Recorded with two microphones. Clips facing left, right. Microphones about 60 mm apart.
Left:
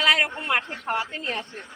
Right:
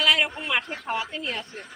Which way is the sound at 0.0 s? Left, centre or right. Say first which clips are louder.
Left 1 dB; left.